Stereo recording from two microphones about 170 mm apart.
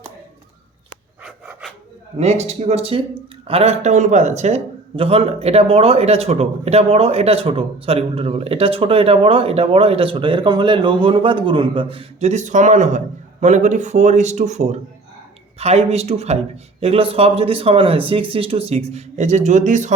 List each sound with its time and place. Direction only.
1.2 s pant: 5° right (ahead or behind)
2.1 s speech: 40° right (ahead or behind)